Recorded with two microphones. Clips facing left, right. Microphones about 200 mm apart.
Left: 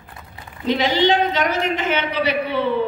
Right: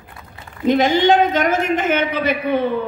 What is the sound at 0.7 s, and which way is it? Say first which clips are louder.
A woman's voice: right 4 dB; 50° right (ahead or behind).